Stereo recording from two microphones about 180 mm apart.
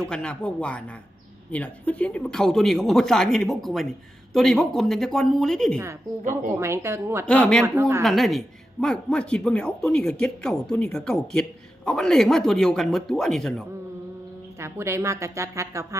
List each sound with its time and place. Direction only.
0.0 s speech: 5° left (ahead or behind)
6.5 s speech: 15° right (ahead or behind)
7.3 s speech: 5° left (ahead or behind)
7.6 s speech: 15° right (ahead or behind)
8.0 s speech: centre (ahead or behind)
14.6 s speech: 15° right (ahead or behind)